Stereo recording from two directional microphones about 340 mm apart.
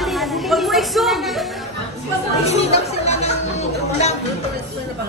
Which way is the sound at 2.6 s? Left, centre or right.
Centre.